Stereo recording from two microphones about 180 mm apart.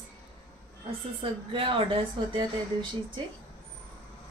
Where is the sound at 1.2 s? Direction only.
30° right (ahead or behind).